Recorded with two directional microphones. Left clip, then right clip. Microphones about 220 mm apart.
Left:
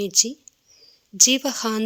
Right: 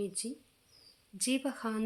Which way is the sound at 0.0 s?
45° left (ahead or behind).